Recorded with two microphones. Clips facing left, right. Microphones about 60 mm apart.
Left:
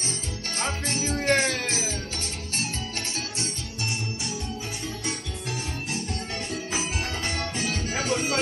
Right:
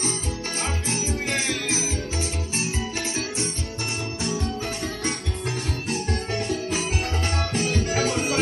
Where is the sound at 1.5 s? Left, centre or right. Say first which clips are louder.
Right 1 dB; right.